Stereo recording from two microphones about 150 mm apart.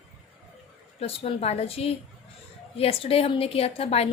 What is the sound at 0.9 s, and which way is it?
A woman's voice, 45° left (ahead or behind).